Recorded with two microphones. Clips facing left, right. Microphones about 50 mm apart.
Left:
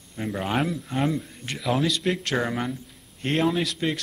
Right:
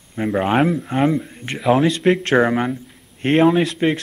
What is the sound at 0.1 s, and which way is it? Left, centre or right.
A man's voice, right.